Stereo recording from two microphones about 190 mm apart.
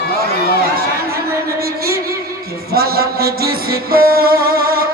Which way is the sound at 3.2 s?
55° right (ahead or behind).